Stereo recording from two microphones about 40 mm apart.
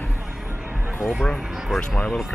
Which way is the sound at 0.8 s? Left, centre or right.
Centre.